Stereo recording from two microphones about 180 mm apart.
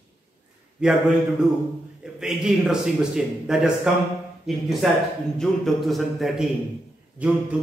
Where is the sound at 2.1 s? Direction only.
5° right (ahead or behind).